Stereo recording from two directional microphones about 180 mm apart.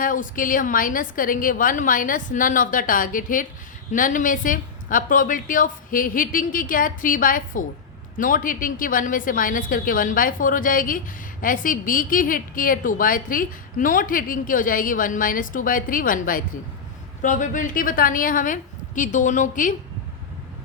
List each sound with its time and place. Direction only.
0.0 s a woman's voice: 50° left (ahead or behind)